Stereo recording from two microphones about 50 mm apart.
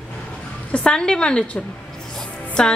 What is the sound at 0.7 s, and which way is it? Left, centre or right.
A woman's voice, centre.